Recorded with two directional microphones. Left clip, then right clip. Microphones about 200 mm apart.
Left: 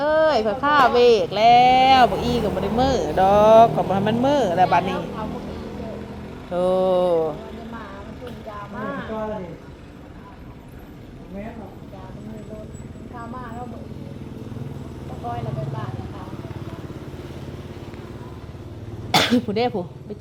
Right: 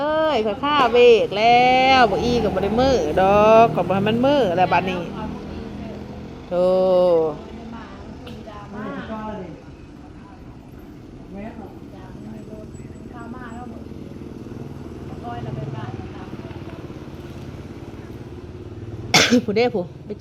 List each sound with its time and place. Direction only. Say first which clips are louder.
0.0 s speech: left 2 dB; 15° left (ahead or behind)
6.5 s speech: right 2 dB; 5° left (ahead or behind)
19.1 s speech: right 3 dB; 5° right (ahead or behind)